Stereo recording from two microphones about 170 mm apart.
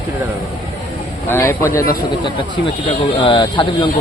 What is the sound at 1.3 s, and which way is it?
Speech, 15° left (ahead or behind).